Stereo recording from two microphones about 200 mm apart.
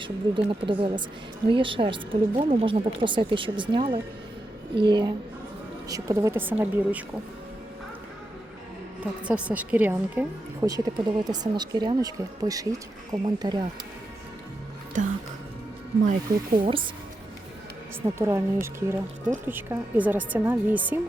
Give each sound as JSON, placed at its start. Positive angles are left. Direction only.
{"t": 0.0, "sound": "a woman's voice", "side_deg": -25}
{"t": 9.2, "sound": "a woman's voice", "side_deg": -5}
{"t": 14.9, "sound": "speech", "side_deg": -40}
{"t": 16.6, "sound": "speech", "side_deg": -25}
{"t": 18.0, "sound": "a woman's voice", "side_deg": -15}